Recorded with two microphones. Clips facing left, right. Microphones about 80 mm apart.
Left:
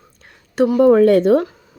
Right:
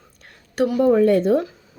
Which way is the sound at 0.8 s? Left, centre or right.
Left.